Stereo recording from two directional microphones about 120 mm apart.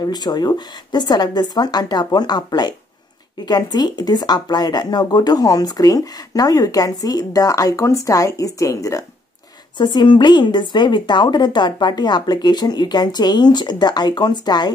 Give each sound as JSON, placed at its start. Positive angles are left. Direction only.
{"t": 0.0, "sound": "speech", "side_deg": 35}
{"t": 9.8, "sound": "speech", "side_deg": 40}